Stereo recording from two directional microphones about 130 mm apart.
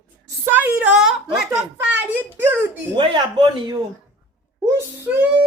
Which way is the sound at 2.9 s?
35° right (ahead or behind).